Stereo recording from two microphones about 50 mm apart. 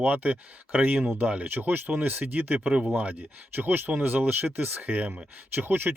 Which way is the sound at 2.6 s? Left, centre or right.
Right.